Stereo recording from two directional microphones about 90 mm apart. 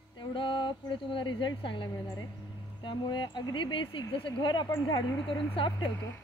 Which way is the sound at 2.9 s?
60° left (ahead or behind).